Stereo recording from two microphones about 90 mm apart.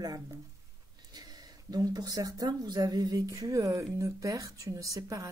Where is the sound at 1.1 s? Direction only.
45° right (ahead or behind).